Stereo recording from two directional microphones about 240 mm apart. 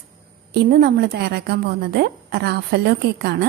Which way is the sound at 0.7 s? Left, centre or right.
Right.